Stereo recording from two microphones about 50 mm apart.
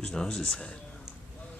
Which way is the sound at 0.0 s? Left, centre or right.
Centre.